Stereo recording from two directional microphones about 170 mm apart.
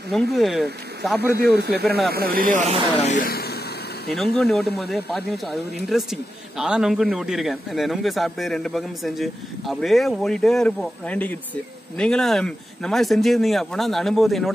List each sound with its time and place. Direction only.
0.1 s a man's voice: centre (ahead or behind)
1.3 s speech: 70° right (ahead or behind); by 2.8 s 45° right (ahead or behind)
3.1 s speech: 60° left (ahead or behind)
4.1 s a man's voice: centre (ahead or behind)